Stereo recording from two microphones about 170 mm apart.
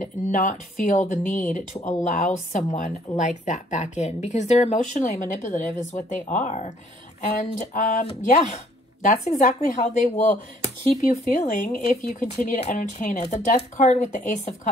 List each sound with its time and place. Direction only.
0.0 s a woman's voice: 50° left (ahead or behind)